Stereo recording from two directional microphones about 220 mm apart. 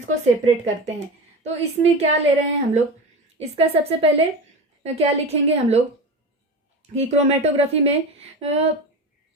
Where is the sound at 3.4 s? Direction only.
25° right (ahead or behind).